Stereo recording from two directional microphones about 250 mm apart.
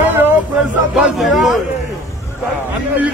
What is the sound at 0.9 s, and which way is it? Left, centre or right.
Speech, centre.